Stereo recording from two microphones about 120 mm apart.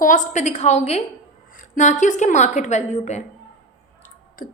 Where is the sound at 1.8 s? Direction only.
90° left; by 3.2 s 75° left (ahead or behind).